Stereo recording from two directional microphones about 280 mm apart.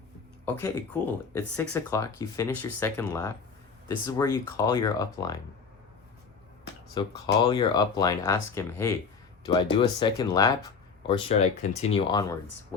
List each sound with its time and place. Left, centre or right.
1.3 s speech: centre
6.9 s speech: centre